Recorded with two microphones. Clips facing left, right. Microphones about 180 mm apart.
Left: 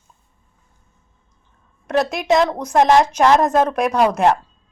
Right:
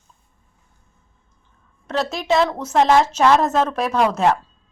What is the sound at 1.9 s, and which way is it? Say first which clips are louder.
A woman's voice: left 3 dB; 15° left (ahead or behind).